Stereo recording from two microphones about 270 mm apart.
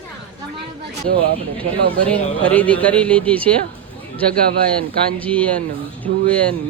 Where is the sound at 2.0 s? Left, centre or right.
Centre.